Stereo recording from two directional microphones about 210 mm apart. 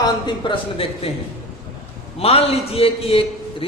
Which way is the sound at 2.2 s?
30° left (ahead or behind).